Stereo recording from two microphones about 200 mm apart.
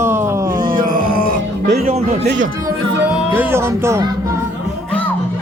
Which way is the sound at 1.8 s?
30° right (ahead or behind).